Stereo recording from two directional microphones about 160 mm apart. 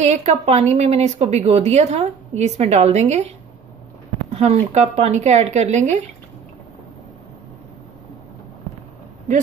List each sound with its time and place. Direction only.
0.0 s speech: 45° right (ahead or behind)
4.3 s speech: 45° right (ahead or behind)